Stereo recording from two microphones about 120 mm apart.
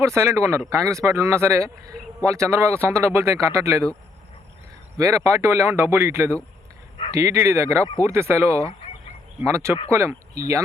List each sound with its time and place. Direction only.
0.0 s speech: 25° right (ahead or behind)
4.9 s speech: 25° right (ahead or behind)